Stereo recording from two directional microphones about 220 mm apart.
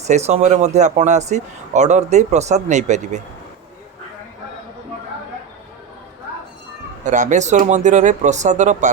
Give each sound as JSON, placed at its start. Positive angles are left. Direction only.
{"t": 0.1, "sound": "speech", "side_deg": -30}
{"t": 7.0, "sound": "speech", "side_deg": -35}